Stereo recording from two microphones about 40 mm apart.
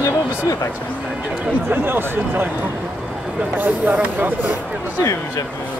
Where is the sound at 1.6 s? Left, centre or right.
Right.